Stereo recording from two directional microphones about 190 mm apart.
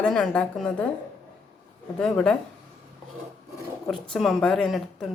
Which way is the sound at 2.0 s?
5° left (ahead or behind).